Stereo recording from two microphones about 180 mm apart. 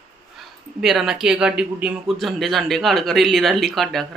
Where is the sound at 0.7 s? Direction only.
Centre (ahead or behind).